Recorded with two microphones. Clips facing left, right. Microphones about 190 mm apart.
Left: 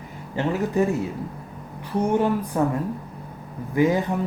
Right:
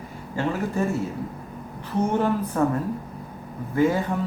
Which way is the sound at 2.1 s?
15° left (ahead or behind).